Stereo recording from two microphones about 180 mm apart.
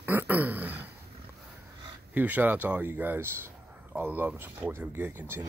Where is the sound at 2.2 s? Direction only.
10° right (ahead or behind).